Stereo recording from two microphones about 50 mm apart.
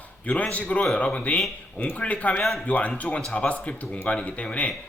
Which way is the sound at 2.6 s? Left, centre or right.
Left.